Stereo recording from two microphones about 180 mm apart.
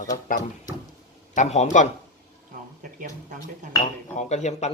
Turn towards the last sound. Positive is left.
turn(degrees=40)  # may be behind; listen again after turning